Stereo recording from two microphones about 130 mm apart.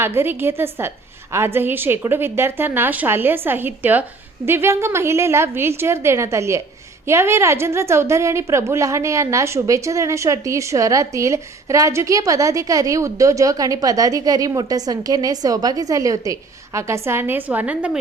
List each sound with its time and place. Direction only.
0.0 s a woman's voice: 20° right (ahead or behind)